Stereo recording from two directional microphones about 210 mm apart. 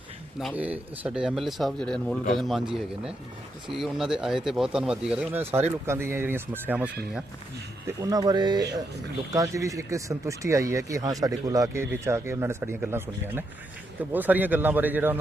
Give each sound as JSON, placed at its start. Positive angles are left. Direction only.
{"t": 0.3, "sound": "speech", "side_deg": -5}